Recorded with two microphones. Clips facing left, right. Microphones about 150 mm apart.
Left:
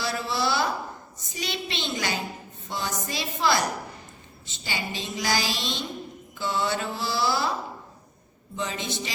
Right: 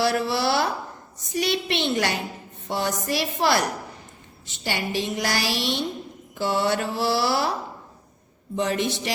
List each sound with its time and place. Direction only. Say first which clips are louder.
0.0 s a sound: right 5 dB; 65° right (ahead or behind)
1.3 s a woman's voice: right 8 dB; 65° right (ahead or behind)
2.6 s mantra: right 6 dB; 65° right (ahead or behind)
4.4 s a woman's voice: right 5 dB; 65° right (ahead or behind)
6.4 s mantra: right 4 dB; 65° right (ahead or behind)
8.5 s a woman's voice: right 7 dB; 65° right (ahead or behind)